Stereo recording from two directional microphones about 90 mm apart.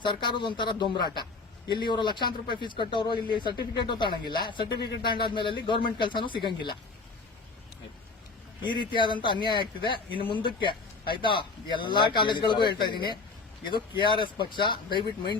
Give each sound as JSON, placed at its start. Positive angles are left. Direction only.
{"t": 0.0, "sound": "speech", "side_deg": 60}
{"t": 8.6, "sound": "speech", "side_deg": 60}
{"t": 14.0, "sound": "speech", "side_deg": 65}